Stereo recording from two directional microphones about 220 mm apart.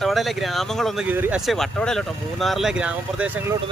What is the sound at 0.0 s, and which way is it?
Speech, centre (ahead or behind).